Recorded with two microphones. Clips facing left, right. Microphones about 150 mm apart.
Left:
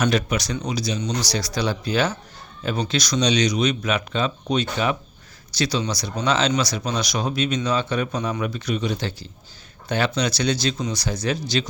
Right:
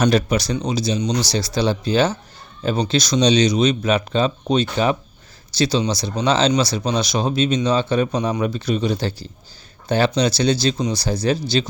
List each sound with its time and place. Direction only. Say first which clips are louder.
0.0 s speech: right 4 dB; 35° right (ahead or behind)
10.2 s speech: right 5 dB; 30° right (ahead or behind)